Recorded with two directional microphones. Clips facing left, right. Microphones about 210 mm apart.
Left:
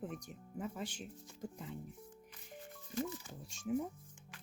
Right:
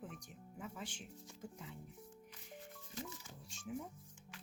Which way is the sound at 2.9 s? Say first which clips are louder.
Left 10 dB; 55° left (ahead or behind).